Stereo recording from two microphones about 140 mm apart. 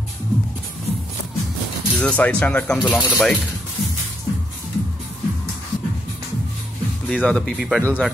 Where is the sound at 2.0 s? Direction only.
10° left (ahead or behind).